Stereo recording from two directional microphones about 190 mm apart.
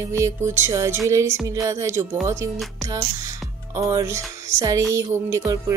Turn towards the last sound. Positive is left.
turn(degrees=-15)  # may be behind; listen again after turning